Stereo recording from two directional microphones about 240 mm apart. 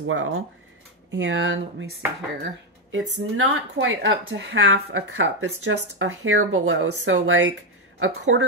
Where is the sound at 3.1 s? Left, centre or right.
Right.